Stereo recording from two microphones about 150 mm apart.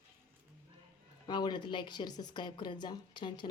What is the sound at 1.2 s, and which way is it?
Speech, 30° left (ahead or behind).